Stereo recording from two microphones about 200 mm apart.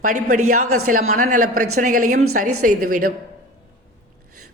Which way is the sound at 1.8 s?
40° right (ahead or behind).